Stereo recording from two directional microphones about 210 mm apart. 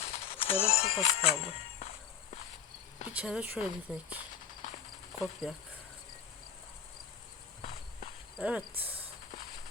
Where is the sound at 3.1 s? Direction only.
5° right (ahead or behind).